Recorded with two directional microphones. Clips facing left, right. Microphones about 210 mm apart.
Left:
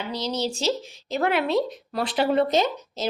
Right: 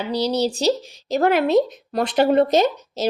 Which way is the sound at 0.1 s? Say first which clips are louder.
Right 7 dB; 35° right (ahead or behind).